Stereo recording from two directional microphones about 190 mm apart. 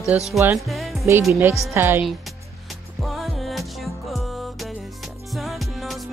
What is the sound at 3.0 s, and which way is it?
Music, centre (ahead or behind).